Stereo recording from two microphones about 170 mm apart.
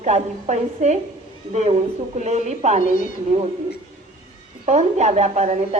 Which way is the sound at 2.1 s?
40° right (ahead or behind).